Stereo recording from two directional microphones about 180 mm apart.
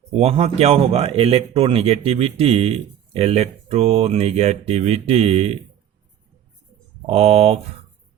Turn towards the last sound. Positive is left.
turn(degrees=-35)  # may be behind; listen again after turning